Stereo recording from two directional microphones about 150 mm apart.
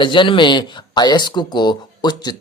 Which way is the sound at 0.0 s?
35° left (ahead or behind).